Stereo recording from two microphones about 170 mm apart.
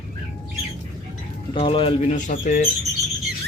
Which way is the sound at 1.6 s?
30° left (ahead or behind).